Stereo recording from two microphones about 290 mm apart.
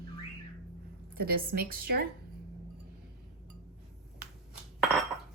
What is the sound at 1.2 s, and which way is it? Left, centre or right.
Speech, right.